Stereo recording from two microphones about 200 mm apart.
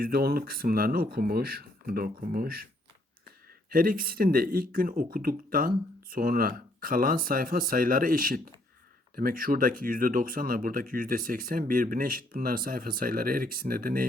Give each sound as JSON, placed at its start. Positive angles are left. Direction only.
{"t": 0.0, "sound": "speech", "side_deg": -50}
{"t": 3.7, "sound": "speech", "side_deg": -45}